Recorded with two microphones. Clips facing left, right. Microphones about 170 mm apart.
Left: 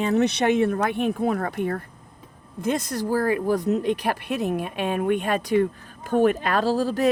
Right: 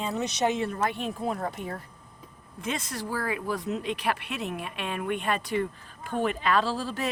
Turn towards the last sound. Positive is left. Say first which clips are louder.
# left 6 dB
turn(degrees=45)  # may be behind; listen again after turning